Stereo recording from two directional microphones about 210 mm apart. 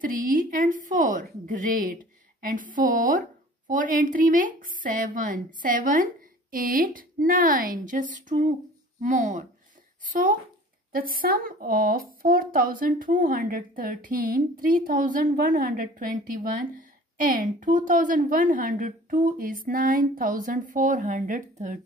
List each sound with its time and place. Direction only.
0.0 s speech: 40° right (ahead or behind)